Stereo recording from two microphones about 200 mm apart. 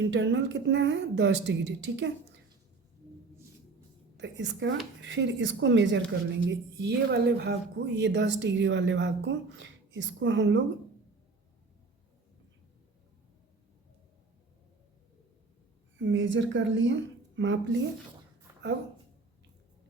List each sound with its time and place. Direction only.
0.0 s a woman's voice: 65° right (ahead or behind)
4.2 s a woman's voice: 65° right (ahead or behind)
16.0 s a woman's voice: 65° right (ahead or behind)
18.5 s a sound: 15° right (ahead or behind)